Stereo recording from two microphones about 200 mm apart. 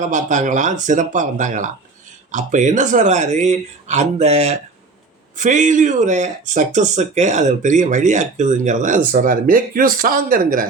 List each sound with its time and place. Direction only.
0.0 s speech: 40° right (ahead or behind)